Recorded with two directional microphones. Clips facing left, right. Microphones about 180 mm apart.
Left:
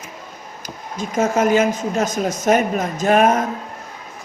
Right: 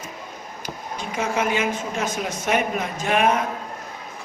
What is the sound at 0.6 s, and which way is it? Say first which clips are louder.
Speech: left 3 dB; 45° left (ahead or behind).